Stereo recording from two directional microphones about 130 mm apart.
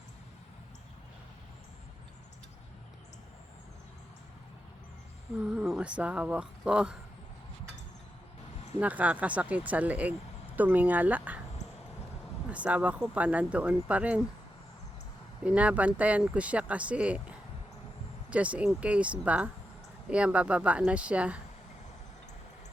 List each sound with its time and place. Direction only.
5.4 s speech: 5° right (ahead or behind)
8.8 s speech: 10° right (ahead or behind)
12.5 s speech: 10° right (ahead or behind)
15.4 s speech: 10° right (ahead or behind)